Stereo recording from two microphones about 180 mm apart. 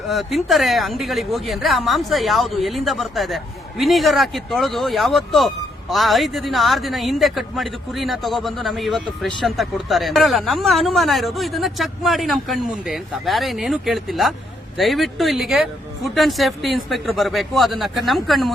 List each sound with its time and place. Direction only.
0.1 s speech: centre (ahead or behind)